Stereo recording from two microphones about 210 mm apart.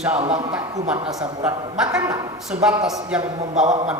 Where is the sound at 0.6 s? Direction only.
15° right (ahead or behind).